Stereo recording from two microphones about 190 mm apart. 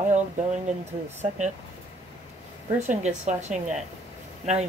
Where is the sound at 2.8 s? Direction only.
35° right (ahead or behind).